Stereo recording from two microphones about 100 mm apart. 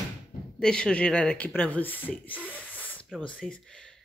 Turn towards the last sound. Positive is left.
turn(degrees=5)  # may be behind; listen again after turning